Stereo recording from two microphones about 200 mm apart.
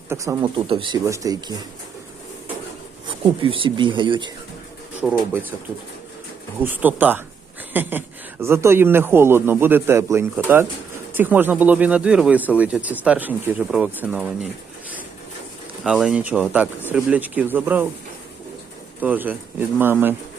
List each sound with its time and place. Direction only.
0.1 s speech: 15° right (ahead or behind)
3.1 s speech: 25° right (ahead or behind)
5.0 s speech: centre (ahead or behind)
6.6 s speech: 10° right (ahead or behind)
15.8 s speech: 5° right (ahead or behind)
18.9 s speech: 10° right (ahead or behind)